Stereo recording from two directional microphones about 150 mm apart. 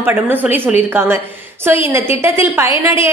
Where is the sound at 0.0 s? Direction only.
15° right (ahead or behind).